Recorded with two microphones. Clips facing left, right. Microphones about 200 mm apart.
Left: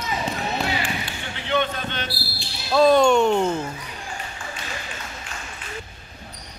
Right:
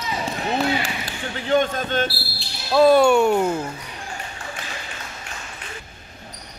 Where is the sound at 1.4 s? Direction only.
45° right (ahead or behind).